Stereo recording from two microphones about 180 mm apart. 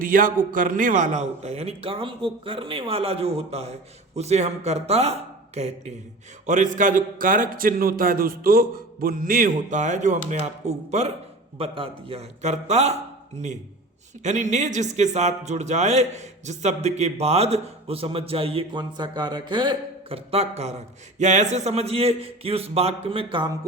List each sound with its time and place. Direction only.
0.0 s a man's voice: 50° right (ahead or behind)
14.3 s a man's voice: 40° right (ahead or behind)